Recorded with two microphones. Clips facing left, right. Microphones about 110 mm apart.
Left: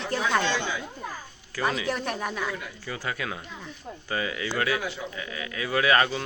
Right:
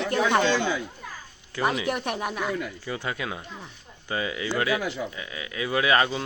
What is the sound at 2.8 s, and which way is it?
Speech, 20° right (ahead or behind).